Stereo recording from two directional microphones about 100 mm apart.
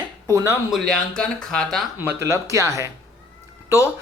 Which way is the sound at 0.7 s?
5° left (ahead or behind).